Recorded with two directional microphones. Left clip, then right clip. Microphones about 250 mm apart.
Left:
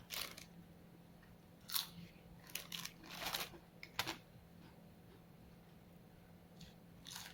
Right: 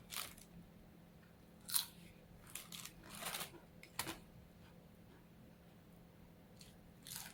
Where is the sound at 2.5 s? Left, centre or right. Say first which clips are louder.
Left 5 dB; left.